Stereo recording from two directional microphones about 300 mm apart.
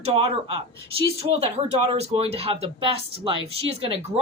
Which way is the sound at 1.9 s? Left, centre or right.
Centre.